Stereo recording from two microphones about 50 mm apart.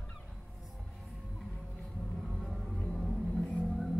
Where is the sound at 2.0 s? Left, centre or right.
Centre.